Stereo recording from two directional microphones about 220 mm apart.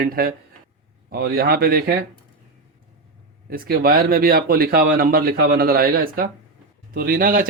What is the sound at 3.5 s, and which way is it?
Speech, 40° right (ahead or behind).